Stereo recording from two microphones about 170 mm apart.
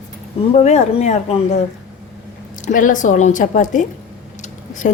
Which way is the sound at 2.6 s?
50° left (ahead or behind).